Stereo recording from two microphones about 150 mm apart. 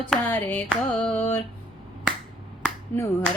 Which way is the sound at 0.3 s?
10° left (ahead or behind).